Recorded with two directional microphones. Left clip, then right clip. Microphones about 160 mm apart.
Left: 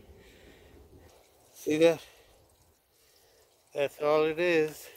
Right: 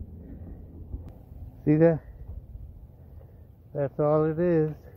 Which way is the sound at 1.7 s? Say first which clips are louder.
Right 2 dB; 40° left (ahead or behind).